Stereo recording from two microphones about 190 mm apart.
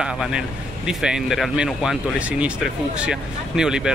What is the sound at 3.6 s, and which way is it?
Speech, 5° right (ahead or behind).